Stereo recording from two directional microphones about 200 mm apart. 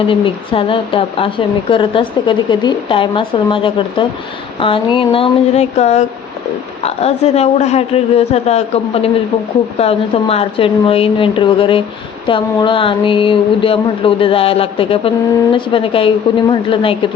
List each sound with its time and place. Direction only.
0.1 s a woman's voice: 25° left (ahead or behind)